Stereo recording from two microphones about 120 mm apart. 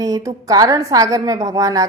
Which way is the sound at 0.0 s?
30° right (ahead or behind).